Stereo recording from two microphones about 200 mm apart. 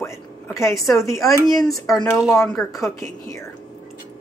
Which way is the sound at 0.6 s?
15° left (ahead or behind).